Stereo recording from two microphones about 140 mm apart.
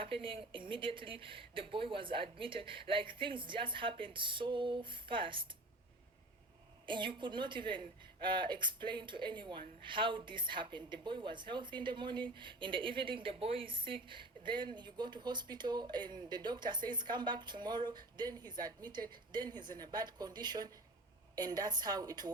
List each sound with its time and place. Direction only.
0.0 s a woman's voice: 40° right (ahead or behind)
6.8 s a woman's voice: 35° right (ahead or behind)